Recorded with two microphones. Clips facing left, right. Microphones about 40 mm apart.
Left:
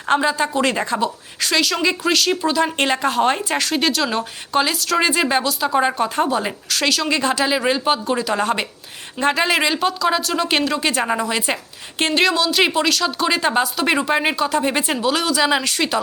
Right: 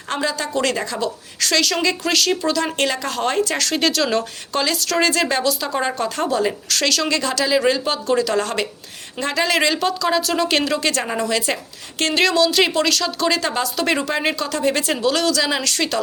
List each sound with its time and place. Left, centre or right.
0.2 s a woman's voice: left
1.5 s speech: centre
2.7 s speech: left; by 7.1 s centre
7.1 s a woman's voice: left
9.6 s speech: centre
12.1 s a woman's voice: centre